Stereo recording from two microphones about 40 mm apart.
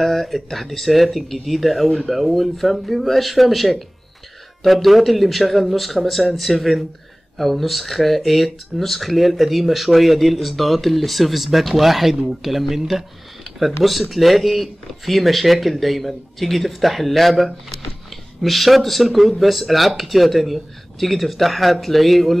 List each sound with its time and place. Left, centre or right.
0.0 s speech: centre